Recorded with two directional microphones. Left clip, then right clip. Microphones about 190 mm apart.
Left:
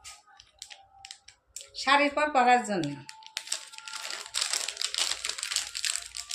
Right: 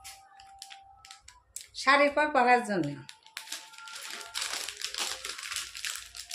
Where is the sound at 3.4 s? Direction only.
5° left (ahead or behind).